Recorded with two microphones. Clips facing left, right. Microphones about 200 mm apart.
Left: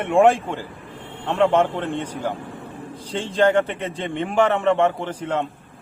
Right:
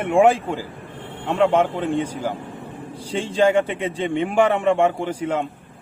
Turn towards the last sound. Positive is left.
turn(degrees=-10)  # may be behind; listen again after turning